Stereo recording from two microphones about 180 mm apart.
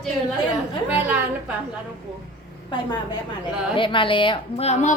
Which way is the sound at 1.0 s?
5° right (ahead or behind).